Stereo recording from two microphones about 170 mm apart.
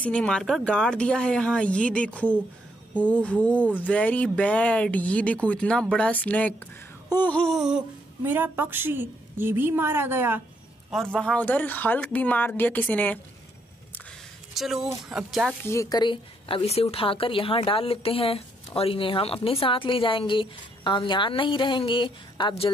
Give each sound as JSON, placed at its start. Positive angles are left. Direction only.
{"t": 0.0, "sound": "speech", "side_deg": 5}
{"t": 7.1, "sound": "a sound", "side_deg": 10}
{"t": 8.2, "sound": "a woman's voice", "side_deg": -10}
{"t": 11.1, "sound": "speech", "side_deg": 5}
{"t": 14.5, "sound": "speech", "side_deg": 0}
{"t": 15.0, "sound": "a sound", "side_deg": -5}
{"t": 15.6, "sound": "a woman's voice", "side_deg": 15}